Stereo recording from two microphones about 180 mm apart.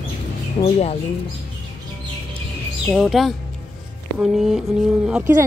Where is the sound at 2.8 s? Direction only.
Centre (ahead or behind).